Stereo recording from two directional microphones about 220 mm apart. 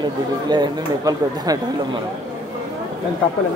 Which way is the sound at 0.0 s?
20° right (ahead or behind).